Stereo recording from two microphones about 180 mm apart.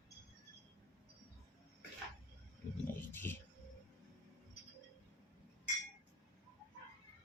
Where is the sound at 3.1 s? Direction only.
10° left (ahead or behind).